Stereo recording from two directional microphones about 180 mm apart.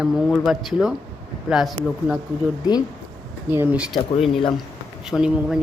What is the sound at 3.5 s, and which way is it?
Speech, 10° right (ahead or behind).